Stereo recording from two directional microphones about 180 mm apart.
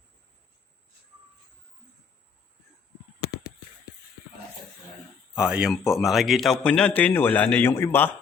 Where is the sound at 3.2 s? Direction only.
20° left (ahead or behind).